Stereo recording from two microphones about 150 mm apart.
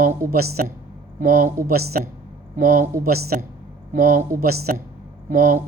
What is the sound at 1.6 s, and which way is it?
Speech, 90° right.